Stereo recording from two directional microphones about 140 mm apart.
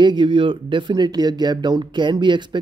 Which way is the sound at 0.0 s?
35° right (ahead or behind).